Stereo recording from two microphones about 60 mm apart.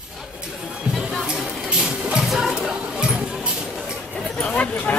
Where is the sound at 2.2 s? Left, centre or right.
Centre.